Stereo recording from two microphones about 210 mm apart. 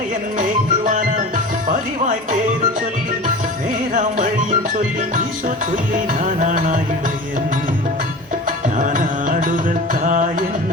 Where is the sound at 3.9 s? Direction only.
40° right (ahead or behind).